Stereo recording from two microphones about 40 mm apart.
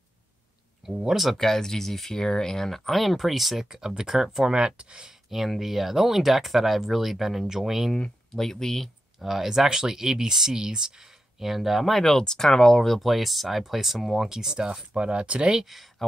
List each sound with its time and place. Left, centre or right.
1.1 s speech: centre
1.4 s speech: centre
3.6 s speech: centre
5.3 s speech: centre
7.9 s speech: centre
9.2 s speech: centre
12.0 s speech: centre; by 15.5 s right
15.5 s speech: centre